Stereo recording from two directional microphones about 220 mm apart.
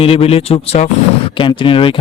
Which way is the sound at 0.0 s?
25° left (ahead or behind).